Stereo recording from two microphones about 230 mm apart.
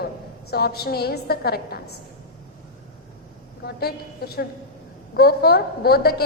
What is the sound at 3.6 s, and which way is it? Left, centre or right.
A woman's voice, left.